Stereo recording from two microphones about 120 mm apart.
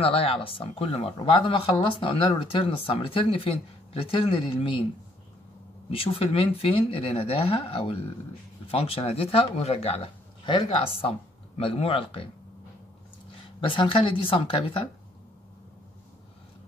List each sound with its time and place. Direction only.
0.0 s speech: 50° left (ahead or behind)
5.9 s speech: 50° left (ahead or behind)
10.4 s speech: 45° left (ahead or behind)
13.6 s speech: 45° left (ahead or behind)